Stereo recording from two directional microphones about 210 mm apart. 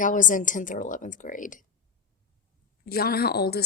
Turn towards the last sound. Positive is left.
turn(degrees=50)  # may be behind; listen again after turning